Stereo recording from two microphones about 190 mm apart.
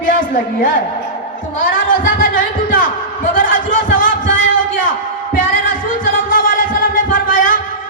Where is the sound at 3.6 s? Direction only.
80° left.